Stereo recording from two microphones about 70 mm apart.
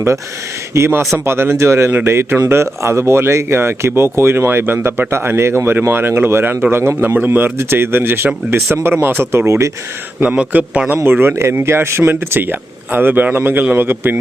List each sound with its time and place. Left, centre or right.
0.9 s speech: right
1.9 s speech: right
2.5 s speech: right
9.5 s speech: right
10.2 s speech: centre